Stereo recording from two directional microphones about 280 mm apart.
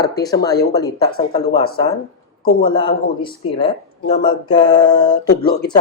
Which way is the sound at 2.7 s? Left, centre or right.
Centre.